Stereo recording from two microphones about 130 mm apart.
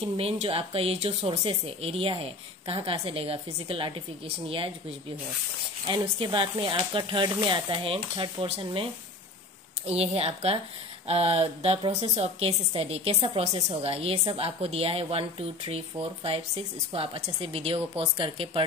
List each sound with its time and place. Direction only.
0.0 s a woman's voice: 50° right (ahead or behind)
6.1 s speech: 40° right (ahead or behind)
9.8 s a woman's voice: 50° right (ahead or behind)